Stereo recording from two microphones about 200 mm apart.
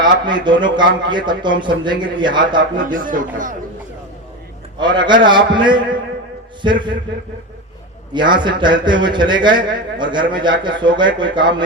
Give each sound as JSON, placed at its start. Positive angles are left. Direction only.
{"t": 0.0, "sound": "a man's voice", "side_deg": -20}
{"t": 2.7, "sound": "speech", "side_deg": -40}
{"t": 4.8, "sound": "a man's voice", "side_deg": -20}
{"t": 8.1, "sound": "a man's voice", "side_deg": -25}